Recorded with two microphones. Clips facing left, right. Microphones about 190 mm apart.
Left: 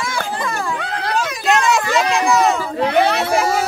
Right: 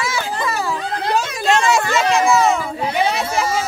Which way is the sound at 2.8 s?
60° left (ahead or behind).